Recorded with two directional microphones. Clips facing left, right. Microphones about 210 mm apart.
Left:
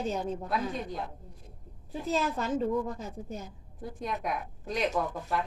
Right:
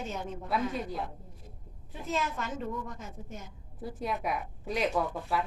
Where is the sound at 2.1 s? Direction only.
35° left (ahead or behind).